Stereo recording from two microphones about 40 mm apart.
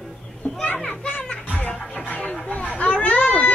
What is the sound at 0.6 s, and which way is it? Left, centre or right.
Children playing, left.